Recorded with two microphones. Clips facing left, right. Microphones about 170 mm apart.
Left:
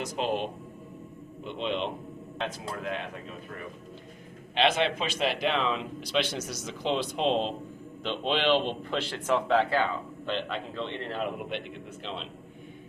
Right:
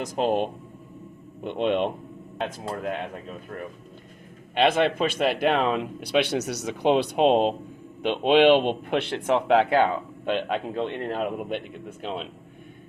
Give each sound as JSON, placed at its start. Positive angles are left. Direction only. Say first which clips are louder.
{"t": 0.0, "sound": "a man's voice", "louder": "right 6 dB", "side_deg": -45}
{"t": 4.5, "sound": "a man's voice", "louder": "right 4 dB", "side_deg": -50}